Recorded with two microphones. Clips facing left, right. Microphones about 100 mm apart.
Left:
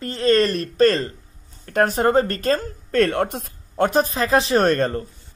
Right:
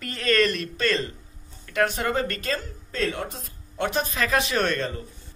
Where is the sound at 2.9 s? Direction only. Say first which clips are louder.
Left 9 dB; 60° left (ahead or behind).